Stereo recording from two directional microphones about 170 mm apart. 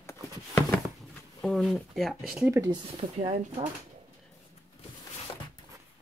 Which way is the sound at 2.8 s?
35° right (ahead or behind).